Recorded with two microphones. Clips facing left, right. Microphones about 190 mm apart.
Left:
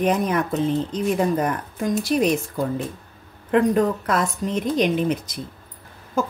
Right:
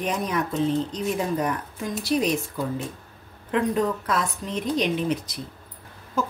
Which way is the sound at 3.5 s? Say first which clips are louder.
Left 5 dB; 55° left (ahead or behind).